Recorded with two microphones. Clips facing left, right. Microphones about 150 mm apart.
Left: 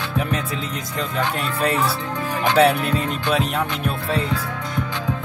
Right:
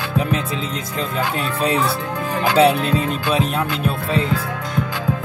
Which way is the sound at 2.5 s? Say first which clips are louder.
Right 2 dB; 20° right (ahead or behind).